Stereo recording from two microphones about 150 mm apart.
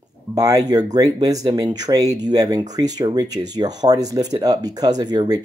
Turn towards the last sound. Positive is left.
turn(degrees=-25)  # may be behind; listen again after turning